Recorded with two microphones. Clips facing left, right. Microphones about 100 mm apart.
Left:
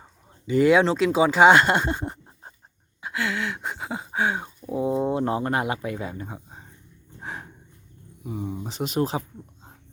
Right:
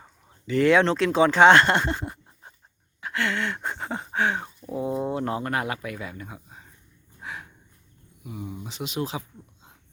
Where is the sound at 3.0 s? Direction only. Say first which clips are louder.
Even; 10° left (ahead or behind); by 6.7 s 30° left (ahead or behind).